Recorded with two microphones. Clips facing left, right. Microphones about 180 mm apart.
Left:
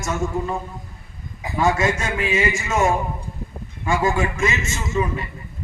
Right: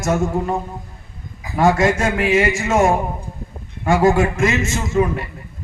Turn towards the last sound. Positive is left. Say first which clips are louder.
# right 5 dB
turn(degrees=-55)  # may be behind; listen again after turning